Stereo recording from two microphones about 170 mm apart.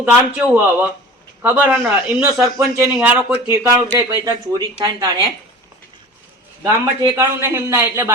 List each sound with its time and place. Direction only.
0.0 s a man's voice: 10° right (ahead or behind)
6.6 s a man's voice: 20° right (ahead or behind)